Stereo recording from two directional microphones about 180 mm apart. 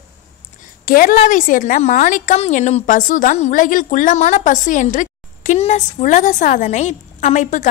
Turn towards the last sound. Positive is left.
turn(degrees=40)  # may be behind; listen again after turning